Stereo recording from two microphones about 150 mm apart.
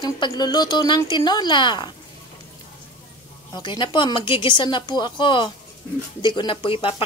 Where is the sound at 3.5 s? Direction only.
30° left (ahead or behind).